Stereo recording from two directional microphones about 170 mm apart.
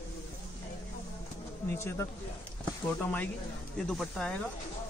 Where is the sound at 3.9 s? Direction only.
5° left (ahead or behind).